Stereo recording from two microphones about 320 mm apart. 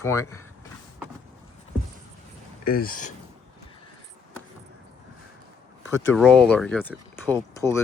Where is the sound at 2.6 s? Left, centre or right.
Left.